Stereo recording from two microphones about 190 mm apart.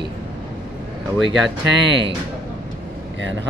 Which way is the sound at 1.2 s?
70° right (ahead or behind).